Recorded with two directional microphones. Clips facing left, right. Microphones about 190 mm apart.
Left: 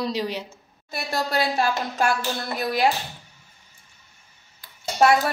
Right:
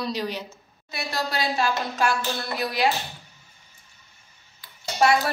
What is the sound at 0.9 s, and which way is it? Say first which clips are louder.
A woman's voice: left 3 dB; 55° left (ahead or behind).